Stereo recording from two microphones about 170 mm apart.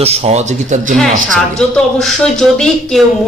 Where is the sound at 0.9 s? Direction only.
5° left (ahead or behind).